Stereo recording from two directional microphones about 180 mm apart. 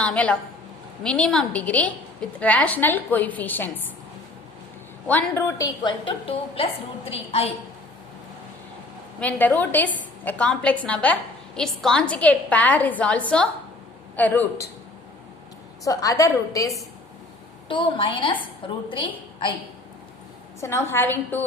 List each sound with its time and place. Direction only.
0.0 s a woman's voice: 5° left (ahead or behind)
5.0 s a woman's voice: 10° left (ahead or behind); by 7.5 s 35° left (ahead or behind)
9.2 s a woman's voice: 10° left (ahead or behind)
15.8 s a woman's voice: 20° left (ahead or behind)
20.6 s a woman's voice: 15° left (ahead or behind)